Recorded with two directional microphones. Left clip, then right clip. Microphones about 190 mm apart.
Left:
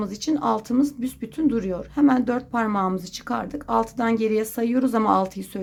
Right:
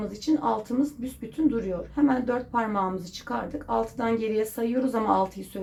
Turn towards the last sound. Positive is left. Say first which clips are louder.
# left 3 dB
turn(degrees=30)  # may be behind; listen again after turning